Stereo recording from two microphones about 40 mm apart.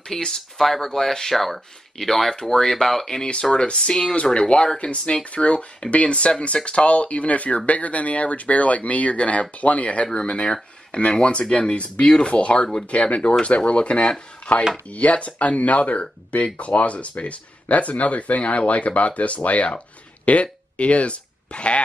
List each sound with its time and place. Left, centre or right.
0.1 s speech: centre
3.5 s speech: left